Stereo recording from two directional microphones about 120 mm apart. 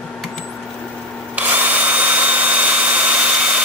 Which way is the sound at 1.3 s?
15° right (ahead or behind).